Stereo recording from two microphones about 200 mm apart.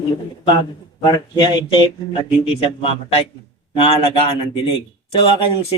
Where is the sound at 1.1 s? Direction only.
20° left (ahead or behind).